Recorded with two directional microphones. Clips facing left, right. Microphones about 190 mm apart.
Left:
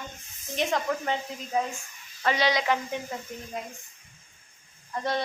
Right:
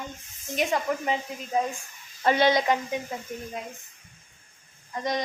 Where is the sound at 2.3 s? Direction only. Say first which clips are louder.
Right 4 dB; 50° right (ahead or behind).